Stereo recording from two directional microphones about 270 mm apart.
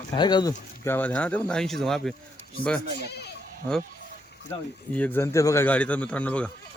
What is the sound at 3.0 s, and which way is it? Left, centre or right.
Speech, left.